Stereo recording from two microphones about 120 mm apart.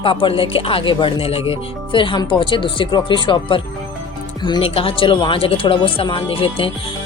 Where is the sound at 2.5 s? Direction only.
40° left (ahead or behind).